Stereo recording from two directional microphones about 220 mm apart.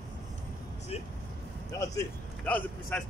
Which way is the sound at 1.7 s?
15° left (ahead or behind).